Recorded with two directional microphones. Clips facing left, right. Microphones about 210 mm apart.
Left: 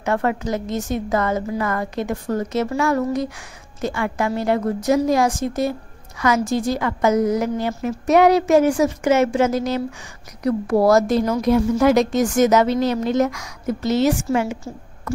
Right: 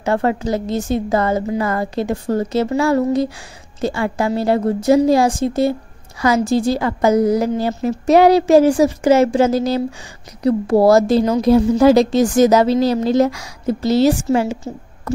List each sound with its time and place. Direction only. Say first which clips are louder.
0.0 s a woman's voice: right 3 dB; 30° right (ahead or behind)